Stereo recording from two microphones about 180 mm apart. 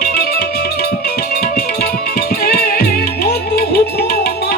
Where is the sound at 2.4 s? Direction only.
55° left (ahead or behind).